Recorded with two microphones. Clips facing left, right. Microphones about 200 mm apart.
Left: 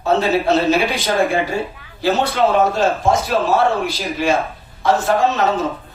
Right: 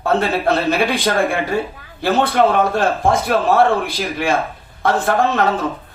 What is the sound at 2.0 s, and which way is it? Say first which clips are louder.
A man's voice: right 1 dB; 55° right (ahead or behind).